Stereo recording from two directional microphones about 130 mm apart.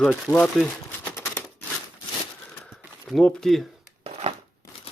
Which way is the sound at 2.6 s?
Centre (ahead or behind).